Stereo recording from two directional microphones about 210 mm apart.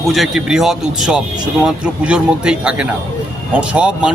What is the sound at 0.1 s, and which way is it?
Speech, centre (ahead or behind).